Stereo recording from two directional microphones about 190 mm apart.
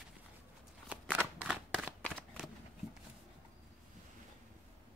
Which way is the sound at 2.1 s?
5° right (ahead or behind).